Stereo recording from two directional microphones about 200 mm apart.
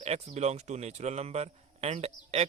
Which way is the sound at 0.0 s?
30° right (ahead or behind).